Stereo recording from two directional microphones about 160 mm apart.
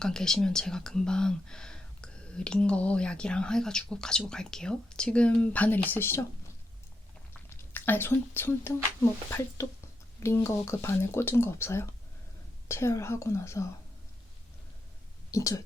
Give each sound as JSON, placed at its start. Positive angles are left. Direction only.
{"t": 0.0, "sound": "speech", "side_deg": 5}
{"t": 7.3, "sound": "a sound", "side_deg": 10}
{"t": 9.6, "sound": "speech", "side_deg": 20}
{"t": 15.3, "sound": "speech", "side_deg": 20}